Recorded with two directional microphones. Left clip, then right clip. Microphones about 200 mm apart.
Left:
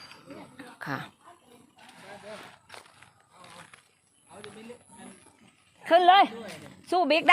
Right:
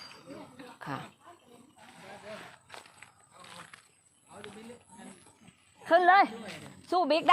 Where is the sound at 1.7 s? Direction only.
50° left (ahead or behind).